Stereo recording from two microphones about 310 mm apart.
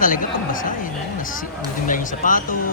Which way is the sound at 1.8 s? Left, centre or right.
Left.